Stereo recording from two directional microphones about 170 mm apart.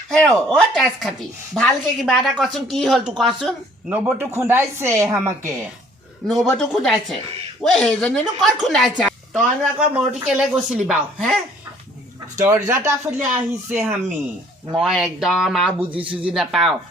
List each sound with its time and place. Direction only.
0.1 s speech: 5° left (ahead or behind)
3.9 s speech: 10° right (ahead or behind)
6.2 s speech: centre (ahead or behind)
12.4 s speech: 20° right (ahead or behind)
13.1 s speech: 10° right (ahead or behind)